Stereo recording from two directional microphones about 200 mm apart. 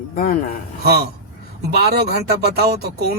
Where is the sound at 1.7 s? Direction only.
50° right (ahead or behind).